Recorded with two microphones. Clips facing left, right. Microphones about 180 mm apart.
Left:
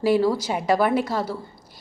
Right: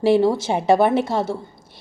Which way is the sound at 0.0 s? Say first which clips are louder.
Right 3 dB; 25° right (ahead or behind).